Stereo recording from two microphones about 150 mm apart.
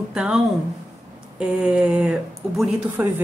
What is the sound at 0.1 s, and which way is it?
Speech, 5° right (ahead or behind).